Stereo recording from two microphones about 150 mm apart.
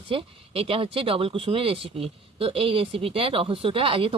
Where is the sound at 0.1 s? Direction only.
40° right (ahead or behind).